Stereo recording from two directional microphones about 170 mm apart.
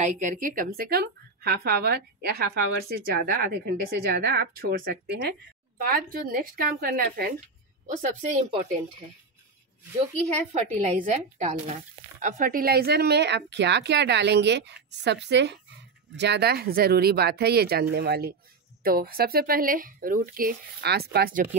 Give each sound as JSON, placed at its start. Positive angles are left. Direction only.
{"t": 0.0, "sound": "a woman's voice", "side_deg": -50}
{"t": 5.8, "sound": "speech", "side_deg": -55}
{"t": 7.3, "sound": "speech", "side_deg": -45}
{"t": 10.3, "sound": "a woman's voice", "side_deg": -45}
{"t": 18.8, "sound": "speech", "side_deg": -60}